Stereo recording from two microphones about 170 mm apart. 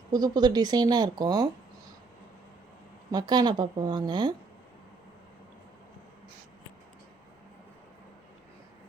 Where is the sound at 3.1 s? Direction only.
25° right (ahead or behind).